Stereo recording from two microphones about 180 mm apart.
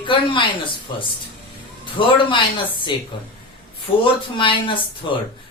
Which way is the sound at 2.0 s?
30° left (ahead or behind).